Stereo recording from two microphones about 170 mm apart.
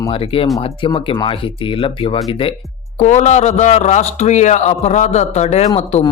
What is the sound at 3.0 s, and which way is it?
A man's voice, 45° left (ahead or behind).